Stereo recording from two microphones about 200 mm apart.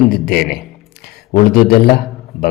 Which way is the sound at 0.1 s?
50° left (ahead or behind).